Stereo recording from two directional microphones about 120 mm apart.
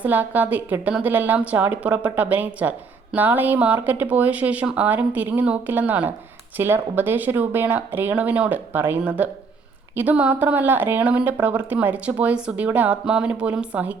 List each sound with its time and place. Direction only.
0.0 s a woman's voice: 15° right (ahead or behind)